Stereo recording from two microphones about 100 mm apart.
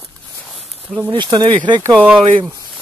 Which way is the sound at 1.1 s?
45° right (ahead or behind).